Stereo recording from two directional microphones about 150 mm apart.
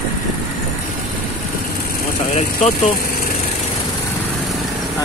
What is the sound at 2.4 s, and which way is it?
Speech, 50° left (ahead or behind).